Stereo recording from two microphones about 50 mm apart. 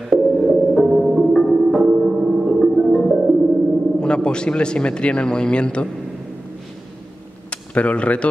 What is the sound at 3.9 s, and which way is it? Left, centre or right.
Speech, centre.